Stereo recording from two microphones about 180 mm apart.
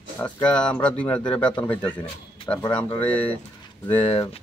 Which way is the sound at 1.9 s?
30° left (ahead or behind).